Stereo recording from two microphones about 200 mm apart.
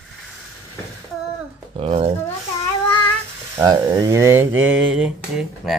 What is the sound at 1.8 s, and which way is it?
Speech, 30° right (ahead or behind).